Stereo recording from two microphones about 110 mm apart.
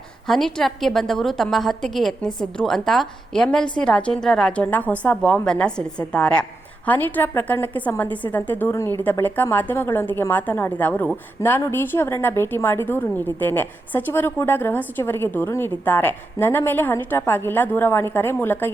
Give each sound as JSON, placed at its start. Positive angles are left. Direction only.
{"t": 0.3, "sound": "a woman's voice", "side_deg": 0}